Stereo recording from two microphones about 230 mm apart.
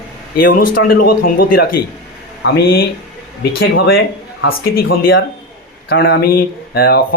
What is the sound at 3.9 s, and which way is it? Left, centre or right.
Speech, left.